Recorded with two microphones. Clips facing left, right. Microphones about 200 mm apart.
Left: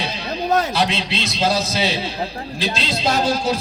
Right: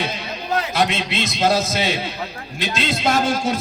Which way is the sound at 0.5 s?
30° left (ahead or behind).